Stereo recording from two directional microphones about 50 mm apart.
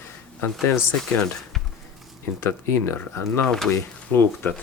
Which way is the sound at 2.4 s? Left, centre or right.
Left.